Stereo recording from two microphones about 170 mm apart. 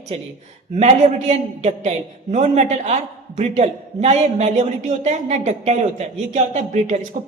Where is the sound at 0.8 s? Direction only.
40° right (ahead or behind).